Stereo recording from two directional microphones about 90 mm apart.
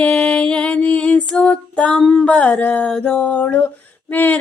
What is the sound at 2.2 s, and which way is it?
Female singing, 15° left (ahead or behind).